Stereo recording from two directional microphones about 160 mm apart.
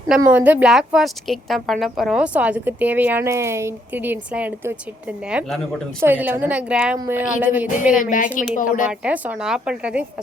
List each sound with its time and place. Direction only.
0.3 s a woman's voice: 10° right (ahead or behind)
8.4 s speech: 55° left (ahead or behind)
8.9 s a woman's voice: 10° right (ahead or behind)